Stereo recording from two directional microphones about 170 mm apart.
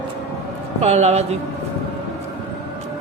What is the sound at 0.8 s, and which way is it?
Speech, 40° right (ahead or behind).